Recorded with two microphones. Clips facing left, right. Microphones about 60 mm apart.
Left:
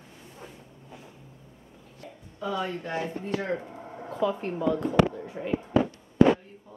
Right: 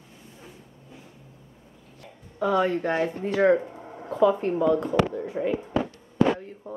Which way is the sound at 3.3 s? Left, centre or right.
Right.